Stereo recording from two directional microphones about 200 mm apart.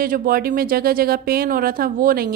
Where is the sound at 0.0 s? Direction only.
45° right (ahead or behind).